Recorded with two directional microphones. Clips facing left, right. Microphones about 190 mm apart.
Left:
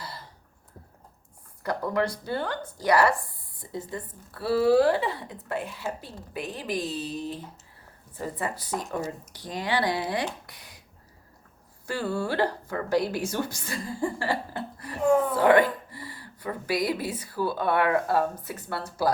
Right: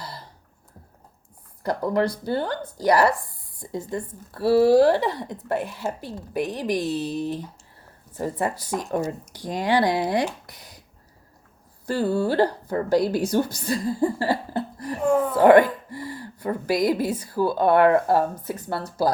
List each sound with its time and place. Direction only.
1.6 s a woman's voice: 35° right (ahead or behind)
6.0 s a woman's voice: 75° right (ahead or behind)
8.1 s a woman's voice: 45° right (ahead or behind)
11.9 s a woman's voice: 35° right (ahead or behind)
15.0 s a sound: centre (ahead or behind)
15.4 s a woman's voice: 45° right (ahead or behind)